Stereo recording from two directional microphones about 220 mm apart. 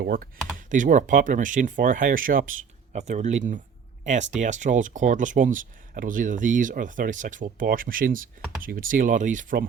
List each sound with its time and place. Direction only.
0.0 s speech: 40° right (ahead or behind)